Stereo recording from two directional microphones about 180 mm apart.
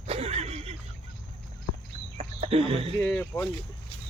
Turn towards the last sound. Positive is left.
turn(degrees=15)  # may be behind; listen again after turning